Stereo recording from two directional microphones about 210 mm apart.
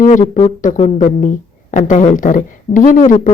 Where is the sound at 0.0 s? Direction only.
35° left (ahead or behind).